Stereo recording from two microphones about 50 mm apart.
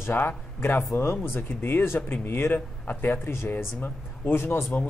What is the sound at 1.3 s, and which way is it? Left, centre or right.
Speech, left.